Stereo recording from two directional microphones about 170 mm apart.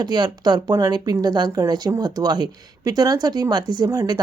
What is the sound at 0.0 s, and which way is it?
A woman's voice, 25° right (ahead or behind).